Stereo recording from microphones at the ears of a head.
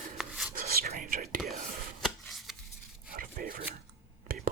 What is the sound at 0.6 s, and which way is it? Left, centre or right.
Whispering, right.